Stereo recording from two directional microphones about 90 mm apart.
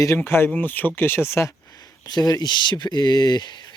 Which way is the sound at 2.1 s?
45° left (ahead or behind).